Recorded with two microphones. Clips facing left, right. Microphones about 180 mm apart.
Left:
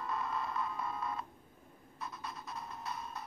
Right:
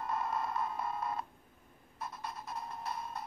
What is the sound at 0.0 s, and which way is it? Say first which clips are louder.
Alarm clock: right 2 dB; 45° right (ahead or behind).